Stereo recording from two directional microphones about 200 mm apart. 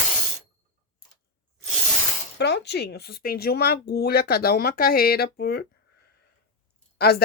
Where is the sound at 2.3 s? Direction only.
55° left (ahead or behind).